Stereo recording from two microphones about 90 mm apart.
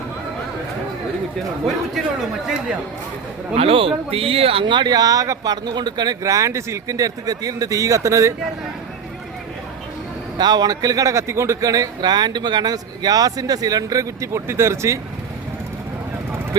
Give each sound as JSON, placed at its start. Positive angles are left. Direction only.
{"t": 3.6, "sound": "speech", "side_deg": -90}
{"t": 6.2, "sound": "speech", "side_deg": -35}
{"t": 10.3, "sound": "speech", "side_deg": -50}